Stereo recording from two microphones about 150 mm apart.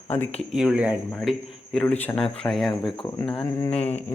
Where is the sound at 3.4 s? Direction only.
20° left (ahead or behind).